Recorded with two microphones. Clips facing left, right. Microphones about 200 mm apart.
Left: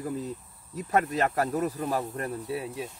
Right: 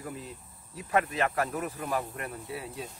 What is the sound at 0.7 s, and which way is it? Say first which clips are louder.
Speech: left 2 dB; 40° left (ahead or behind).